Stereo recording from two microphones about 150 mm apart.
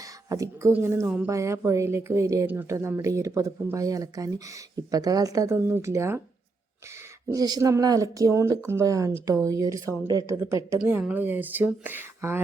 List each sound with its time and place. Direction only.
0.3 s speech: 20° right (ahead or behind)
7.3 s speech: 25° right (ahead or behind)